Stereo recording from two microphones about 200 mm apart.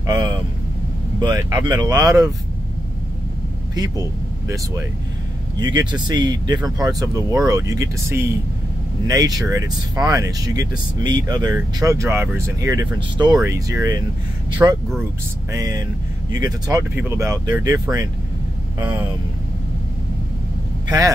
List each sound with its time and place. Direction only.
0.0 s vehicle: 20° right (ahead or behind)
1.2 s speech: 20° right (ahead or behind)
5.6 s speech: 20° right (ahead or behind)